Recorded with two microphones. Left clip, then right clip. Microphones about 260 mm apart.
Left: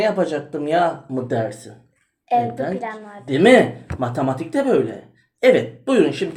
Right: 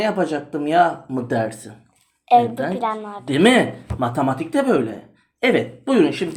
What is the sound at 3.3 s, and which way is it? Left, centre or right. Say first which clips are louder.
A woman's voice: left 3 dB; right.